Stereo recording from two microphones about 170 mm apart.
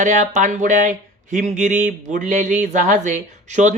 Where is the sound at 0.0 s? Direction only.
45° right (ahead or behind).